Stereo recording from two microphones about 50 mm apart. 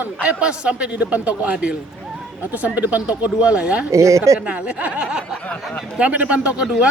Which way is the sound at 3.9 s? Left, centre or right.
Right.